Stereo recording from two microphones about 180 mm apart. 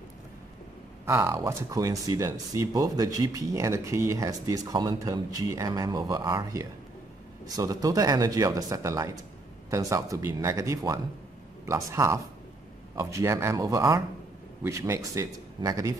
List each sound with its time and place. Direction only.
1.0 s speech: 15° right (ahead or behind)